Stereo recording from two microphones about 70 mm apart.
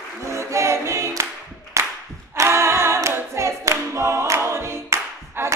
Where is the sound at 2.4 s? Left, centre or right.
Right.